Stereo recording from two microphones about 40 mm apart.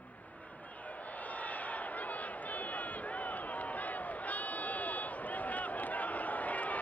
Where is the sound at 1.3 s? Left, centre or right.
Left.